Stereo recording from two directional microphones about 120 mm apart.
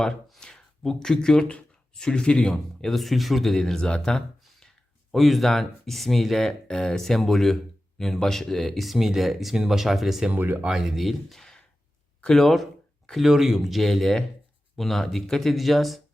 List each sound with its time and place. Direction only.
0.0 s speech: 5° left (ahead or behind)
10.3 s speech: 15° right (ahead or behind)
10.7 s speech: centre (ahead or behind)